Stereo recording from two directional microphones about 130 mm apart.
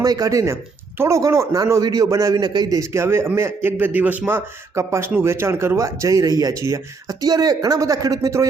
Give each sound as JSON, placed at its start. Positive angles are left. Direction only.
{"t": 0.0, "sound": "a man's voice", "side_deg": -30}